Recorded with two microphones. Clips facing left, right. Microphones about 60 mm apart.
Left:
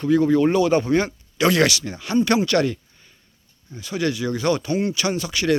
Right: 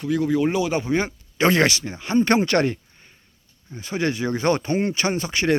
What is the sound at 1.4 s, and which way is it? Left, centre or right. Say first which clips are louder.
Speech: even; right.